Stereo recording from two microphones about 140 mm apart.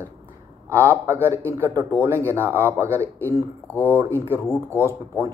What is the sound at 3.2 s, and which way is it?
Speech, 15° left (ahead or behind).